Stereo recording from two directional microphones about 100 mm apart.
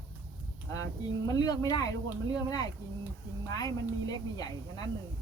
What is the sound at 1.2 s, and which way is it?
Speech, 40° left (ahead or behind).